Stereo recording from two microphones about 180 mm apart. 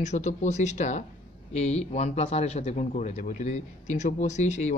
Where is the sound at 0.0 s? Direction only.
40° left (ahead or behind).